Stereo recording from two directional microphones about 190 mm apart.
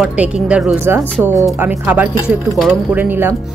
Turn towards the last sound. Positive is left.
turn(degrees=-10)  # may be behind; listen again after turning